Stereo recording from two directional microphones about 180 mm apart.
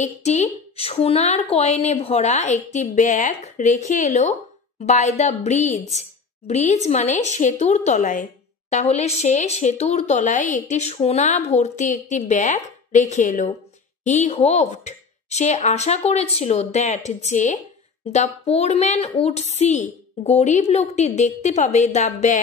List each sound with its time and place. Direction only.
0.0 s a woman's voice: 40° left (ahead or behind)